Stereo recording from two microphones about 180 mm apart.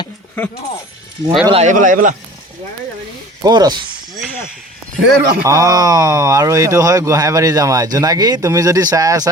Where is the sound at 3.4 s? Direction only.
20° right (ahead or behind).